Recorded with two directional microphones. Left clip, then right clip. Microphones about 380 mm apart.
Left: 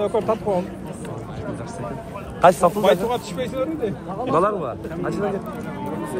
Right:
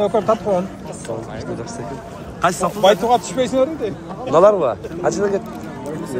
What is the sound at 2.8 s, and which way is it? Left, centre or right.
A man's voice, centre.